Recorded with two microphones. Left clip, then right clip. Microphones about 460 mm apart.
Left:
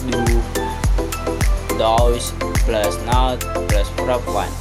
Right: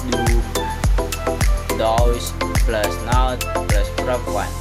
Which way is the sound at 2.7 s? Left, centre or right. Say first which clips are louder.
Left 2 dB; right.